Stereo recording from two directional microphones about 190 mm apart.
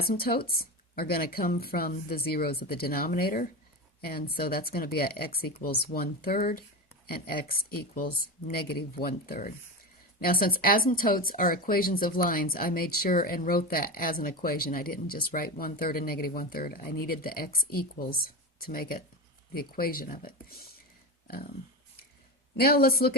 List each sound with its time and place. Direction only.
0.0 s speech: 55° left (ahead or behind)
22.5 s speech: 55° left (ahead or behind)